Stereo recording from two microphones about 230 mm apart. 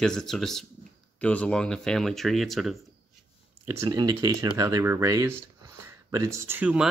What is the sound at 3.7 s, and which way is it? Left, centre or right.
Speech, centre.